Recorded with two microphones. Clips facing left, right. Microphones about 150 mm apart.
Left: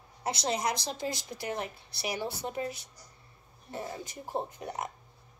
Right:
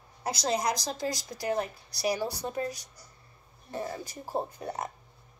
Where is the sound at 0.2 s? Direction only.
25° left (ahead or behind).